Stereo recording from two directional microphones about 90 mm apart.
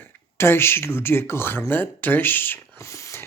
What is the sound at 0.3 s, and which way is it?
Speech, 25° left (ahead or behind).